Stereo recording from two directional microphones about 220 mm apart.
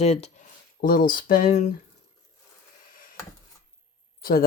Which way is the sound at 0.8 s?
40° left (ahead or behind).